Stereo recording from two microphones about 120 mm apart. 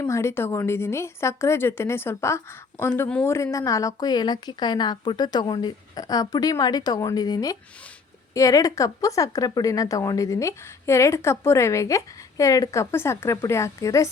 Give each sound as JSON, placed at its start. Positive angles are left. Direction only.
{"t": 0.1, "sound": "a woman's voice", "side_deg": 25}